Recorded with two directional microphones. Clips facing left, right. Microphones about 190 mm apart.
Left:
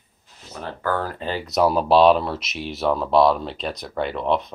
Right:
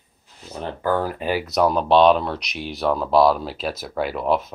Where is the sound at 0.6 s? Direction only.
15° right (ahead or behind).